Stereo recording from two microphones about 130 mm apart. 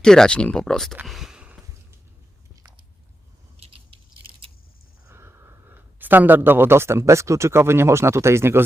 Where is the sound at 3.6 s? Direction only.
45° right (ahead or behind).